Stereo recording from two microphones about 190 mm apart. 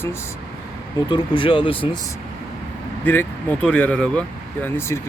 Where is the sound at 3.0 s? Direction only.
10° left (ahead or behind).